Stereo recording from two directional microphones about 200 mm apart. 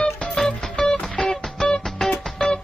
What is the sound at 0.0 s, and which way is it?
Music, 5° left (ahead or behind).